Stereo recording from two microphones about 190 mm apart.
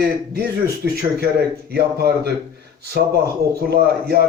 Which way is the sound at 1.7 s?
55° right (ahead or behind).